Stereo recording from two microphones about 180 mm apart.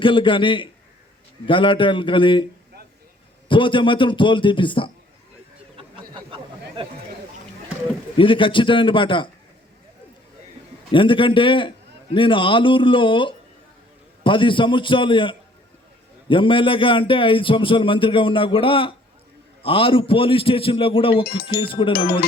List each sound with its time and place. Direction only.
0.0 s a man's voice: 30° left (ahead or behind)
3.5 s a man's voice: 25° left (ahead or behind)
6.1 s a sound: 30° right (ahead or behind)
8.2 s a man's voice: 30° left (ahead or behind)
10.9 s a man's voice: 30° left (ahead or behind)